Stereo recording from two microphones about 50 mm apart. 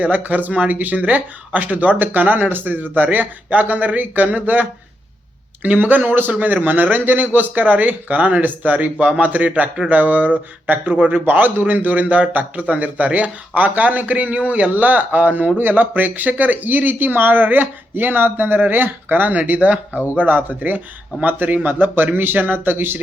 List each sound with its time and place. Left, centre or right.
0.0 s speech: right